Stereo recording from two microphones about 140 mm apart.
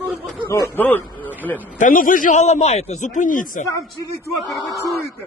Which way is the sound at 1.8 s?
75° left (ahead or behind).